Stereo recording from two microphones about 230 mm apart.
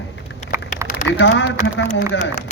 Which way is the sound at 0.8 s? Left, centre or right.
Centre.